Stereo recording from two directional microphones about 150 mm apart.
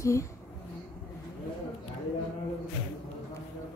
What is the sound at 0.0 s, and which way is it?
Speech, 20° left (ahead or behind).